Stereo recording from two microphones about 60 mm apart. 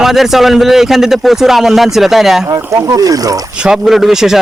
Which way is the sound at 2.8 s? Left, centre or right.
Right.